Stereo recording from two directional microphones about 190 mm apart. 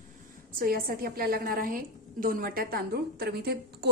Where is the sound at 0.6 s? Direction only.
50° right (ahead or behind).